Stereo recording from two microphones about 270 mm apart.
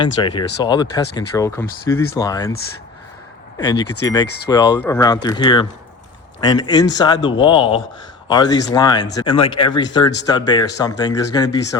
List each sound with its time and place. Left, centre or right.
0.0 s speech: centre
4.0 s speech: centre